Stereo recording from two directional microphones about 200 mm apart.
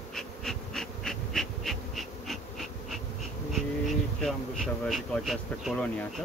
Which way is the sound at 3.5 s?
Centre (ahead or behind).